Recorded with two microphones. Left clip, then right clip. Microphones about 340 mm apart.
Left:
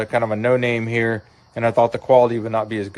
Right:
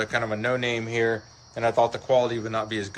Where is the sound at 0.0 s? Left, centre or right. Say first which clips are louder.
Left 6 dB; centre.